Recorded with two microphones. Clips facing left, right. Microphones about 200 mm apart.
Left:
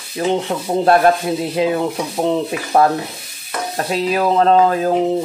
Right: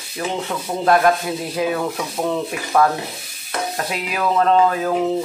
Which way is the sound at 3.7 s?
35° left (ahead or behind).